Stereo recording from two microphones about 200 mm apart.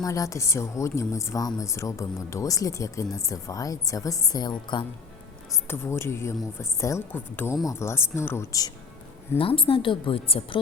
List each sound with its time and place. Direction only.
0.0 s speech: 15° left (ahead or behind)
5.6 s speech: 10° left (ahead or behind)
9.4 s a woman's voice: 25° left (ahead or behind)